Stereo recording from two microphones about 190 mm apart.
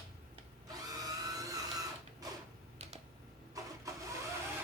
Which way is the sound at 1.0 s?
20° right (ahead or behind).